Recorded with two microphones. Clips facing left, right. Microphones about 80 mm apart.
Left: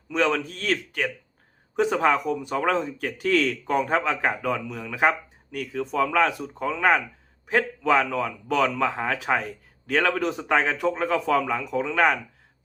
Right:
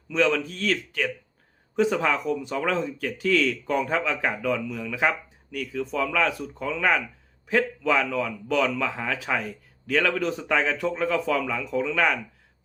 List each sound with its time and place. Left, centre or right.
0.2 s speech: left